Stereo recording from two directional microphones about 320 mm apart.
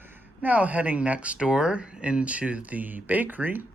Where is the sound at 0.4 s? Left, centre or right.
Centre.